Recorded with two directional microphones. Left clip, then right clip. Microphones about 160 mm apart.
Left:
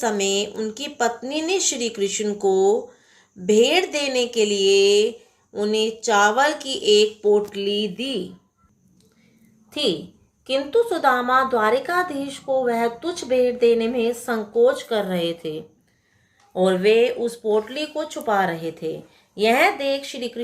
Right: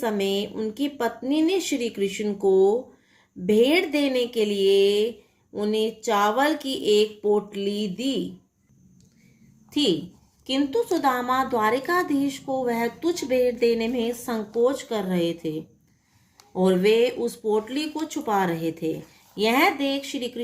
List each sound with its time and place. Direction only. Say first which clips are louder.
0.0 s speech: left 3 dB; 40° right (ahead or behind)
9.6 s a woman's voice: even; 30° right (ahead or behind)